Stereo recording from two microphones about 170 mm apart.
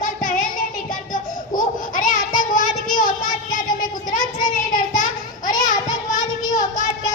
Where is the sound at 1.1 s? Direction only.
50° left (ahead or behind).